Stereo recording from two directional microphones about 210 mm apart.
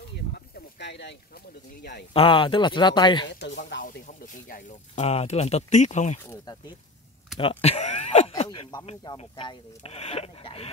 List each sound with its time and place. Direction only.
0.7 s speech: 55° left (ahead or behind)
2.1 s speech: 25° left (ahead or behind)
3.8 s speech: 40° left (ahead or behind)
6.2 s speech: 15° left (ahead or behind)
7.3 s speech: 25° left (ahead or behind)